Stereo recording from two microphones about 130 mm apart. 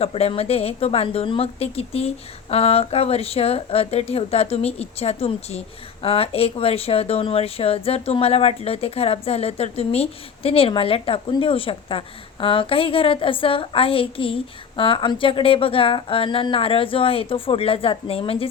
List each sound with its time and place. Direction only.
0.0 s speech: 50° left (ahead or behind)